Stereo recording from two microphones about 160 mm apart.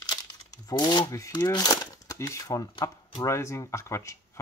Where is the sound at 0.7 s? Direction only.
25° left (ahead or behind).